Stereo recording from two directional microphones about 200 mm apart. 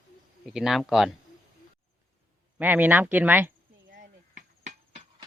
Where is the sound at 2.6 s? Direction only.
10° right (ahead or behind).